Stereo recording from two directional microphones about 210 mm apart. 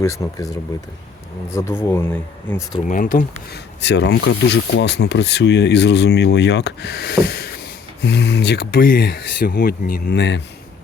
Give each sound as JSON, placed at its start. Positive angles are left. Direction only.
{"t": 0.0, "sound": "speech", "side_deg": 15}
{"t": 2.8, "sound": "speech", "side_deg": 40}
{"t": 3.8, "sound": "speech", "side_deg": 55}